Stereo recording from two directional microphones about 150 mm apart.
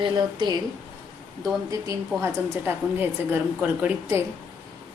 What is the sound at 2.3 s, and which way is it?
A woman's voice, 15° right (ahead or behind).